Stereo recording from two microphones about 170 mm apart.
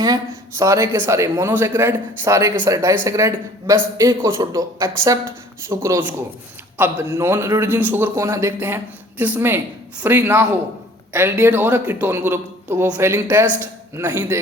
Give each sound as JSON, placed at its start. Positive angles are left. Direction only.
{"t": 0.6, "sound": "a man's voice", "side_deg": -15}